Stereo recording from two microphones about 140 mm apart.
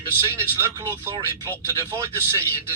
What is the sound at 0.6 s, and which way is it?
Speech, 20° right (ahead or behind).